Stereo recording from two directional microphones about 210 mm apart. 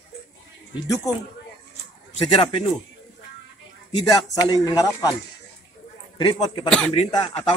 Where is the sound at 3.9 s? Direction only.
20° left (ahead or behind).